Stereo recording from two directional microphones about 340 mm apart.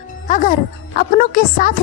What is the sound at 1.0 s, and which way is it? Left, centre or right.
Speech, left.